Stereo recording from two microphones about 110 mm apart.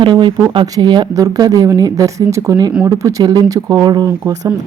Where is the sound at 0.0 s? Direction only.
45° right (ahead or behind).